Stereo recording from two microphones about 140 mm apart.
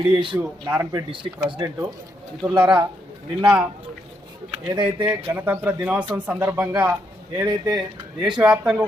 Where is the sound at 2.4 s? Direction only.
5° right (ahead or behind).